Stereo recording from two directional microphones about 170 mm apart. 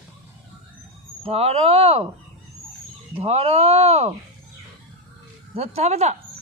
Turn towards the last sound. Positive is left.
turn(degrees=-40)  # may be behind; listen again after turning